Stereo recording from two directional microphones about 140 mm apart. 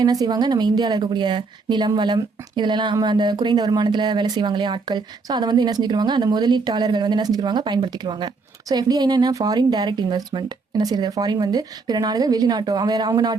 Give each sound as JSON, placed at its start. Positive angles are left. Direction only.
{"t": 0.0, "sound": "a woman's voice", "side_deg": -30}